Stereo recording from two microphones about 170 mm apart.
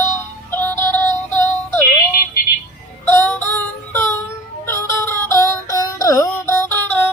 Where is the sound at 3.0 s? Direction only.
15° left (ahead or behind).